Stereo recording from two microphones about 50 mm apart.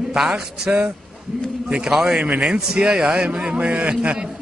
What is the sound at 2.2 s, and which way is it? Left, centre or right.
A man's voice, right.